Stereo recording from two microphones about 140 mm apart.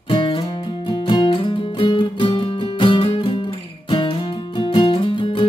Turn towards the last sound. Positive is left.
turn(degrees=35)  # may be behind; listen again after turning